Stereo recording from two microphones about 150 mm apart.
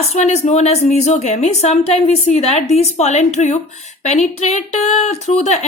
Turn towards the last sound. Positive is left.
turn(degrees=45)  # may be behind; listen again after turning